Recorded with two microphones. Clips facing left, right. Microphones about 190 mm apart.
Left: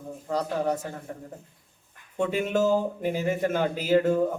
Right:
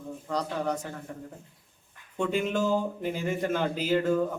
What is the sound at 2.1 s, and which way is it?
Speech, 5° left (ahead or behind).